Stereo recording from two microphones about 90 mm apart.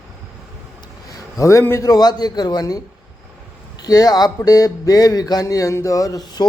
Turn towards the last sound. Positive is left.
turn(degrees=40)  # may be behind; listen again after turning